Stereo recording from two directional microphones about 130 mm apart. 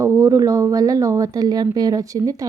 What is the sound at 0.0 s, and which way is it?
Speech, 25° right (ahead or behind).